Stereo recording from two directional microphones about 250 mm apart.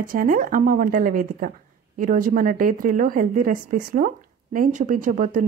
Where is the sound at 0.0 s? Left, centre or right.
Right.